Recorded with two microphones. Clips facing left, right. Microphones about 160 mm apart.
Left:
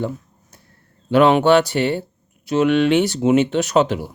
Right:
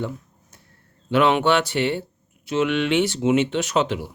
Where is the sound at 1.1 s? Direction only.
40° left (ahead or behind).